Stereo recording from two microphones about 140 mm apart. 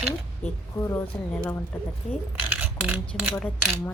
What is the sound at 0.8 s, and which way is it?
Speech, 20° left (ahead or behind).